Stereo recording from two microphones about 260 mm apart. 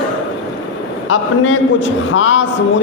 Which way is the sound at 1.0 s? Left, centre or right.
Left.